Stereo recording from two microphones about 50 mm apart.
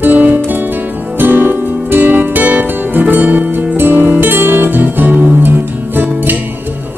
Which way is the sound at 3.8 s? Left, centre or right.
Right.